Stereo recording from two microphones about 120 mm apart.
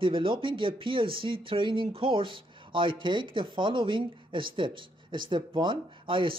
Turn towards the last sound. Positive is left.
turn(degrees=-45)  # may be behind; listen again after turning